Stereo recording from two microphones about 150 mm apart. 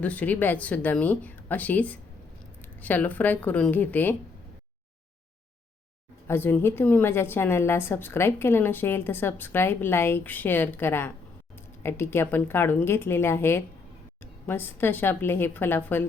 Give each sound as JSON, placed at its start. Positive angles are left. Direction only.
{"t": 0.0, "sound": "a woman's voice", "side_deg": 10}
{"t": 6.2, "sound": "a woman's voice", "side_deg": 15}